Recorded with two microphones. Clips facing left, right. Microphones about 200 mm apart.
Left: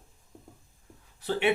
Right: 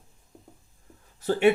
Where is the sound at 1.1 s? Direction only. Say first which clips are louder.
Right 7 dB; 45° right (ahead or behind).